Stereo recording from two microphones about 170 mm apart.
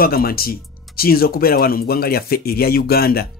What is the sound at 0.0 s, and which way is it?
Speech, 60° left (ahead or behind).